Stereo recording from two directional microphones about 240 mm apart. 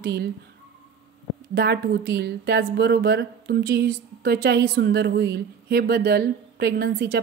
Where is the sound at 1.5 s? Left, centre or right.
Right.